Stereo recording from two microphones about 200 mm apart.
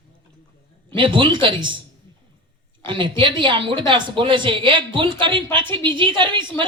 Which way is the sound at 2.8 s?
25° right (ahead or behind).